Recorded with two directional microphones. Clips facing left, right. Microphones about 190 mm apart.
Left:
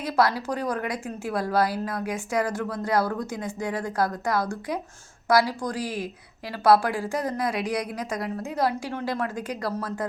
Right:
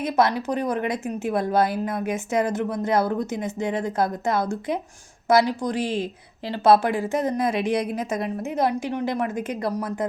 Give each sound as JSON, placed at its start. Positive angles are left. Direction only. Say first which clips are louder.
{"t": 0.0, "sound": "a woman's voice", "louder": "right 2 dB", "side_deg": -20}